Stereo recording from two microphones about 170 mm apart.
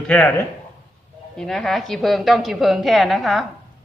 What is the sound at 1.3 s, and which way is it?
A woman's voice, 5° left (ahead or behind).